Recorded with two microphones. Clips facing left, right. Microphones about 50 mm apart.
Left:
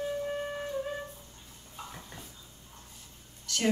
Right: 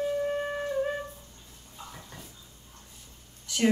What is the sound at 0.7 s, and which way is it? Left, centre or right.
Music, right.